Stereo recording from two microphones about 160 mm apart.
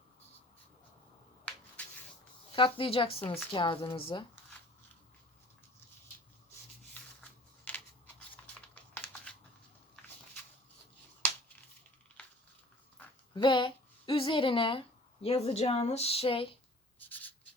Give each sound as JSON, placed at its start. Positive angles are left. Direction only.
{"t": 2.5, "sound": "a woman's voice", "side_deg": 35}
{"t": 7.2, "sound": "a sound", "side_deg": 10}
{"t": 8.7, "sound": "typing", "side_deg": 10}
{"t": 13.0, "sound": "dog", "side_deg": 10}
{"t": 13.3, "sound": "speech", "side_deg": 30}
{"t": 17.0, "sound": "writing", "side_deg": 10}